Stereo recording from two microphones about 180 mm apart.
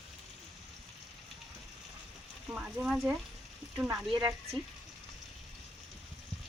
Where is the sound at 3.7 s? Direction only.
15° right (ahead or behind).